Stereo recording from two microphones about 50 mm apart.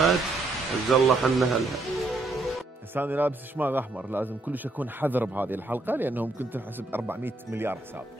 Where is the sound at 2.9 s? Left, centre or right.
Right.